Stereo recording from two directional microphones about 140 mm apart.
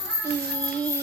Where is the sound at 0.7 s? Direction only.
10° left (ahead or behind).